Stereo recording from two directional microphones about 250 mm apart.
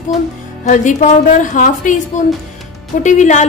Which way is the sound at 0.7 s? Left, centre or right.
Left.